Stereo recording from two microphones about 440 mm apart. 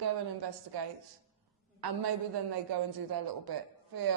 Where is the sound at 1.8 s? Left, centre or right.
Right.